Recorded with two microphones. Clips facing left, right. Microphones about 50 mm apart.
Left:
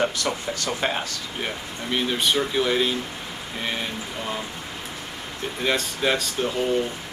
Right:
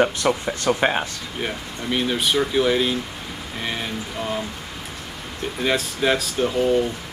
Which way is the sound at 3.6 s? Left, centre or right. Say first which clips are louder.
Right 1 dB; centre.